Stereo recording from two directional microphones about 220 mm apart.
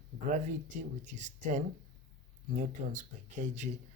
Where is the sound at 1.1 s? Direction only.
35° right (ahead or behind).